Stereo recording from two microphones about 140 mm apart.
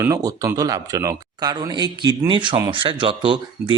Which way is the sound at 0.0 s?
25° right (ahead or behind).